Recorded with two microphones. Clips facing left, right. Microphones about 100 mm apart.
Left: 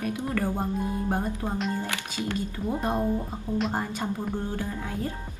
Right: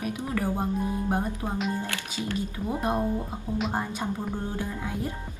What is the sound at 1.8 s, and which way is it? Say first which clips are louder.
Speech: left 1 dB; 20° left (ahead or behind).